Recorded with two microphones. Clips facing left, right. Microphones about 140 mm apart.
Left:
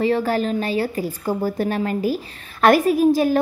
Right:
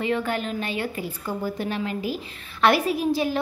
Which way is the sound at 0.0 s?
35° left (ahead or behind).